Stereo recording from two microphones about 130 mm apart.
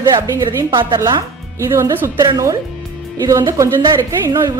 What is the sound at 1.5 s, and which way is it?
A woman's voice, 20° right (ahead or behind).